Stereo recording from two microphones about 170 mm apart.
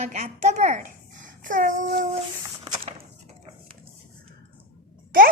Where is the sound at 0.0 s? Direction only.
40° right (ahead or behind).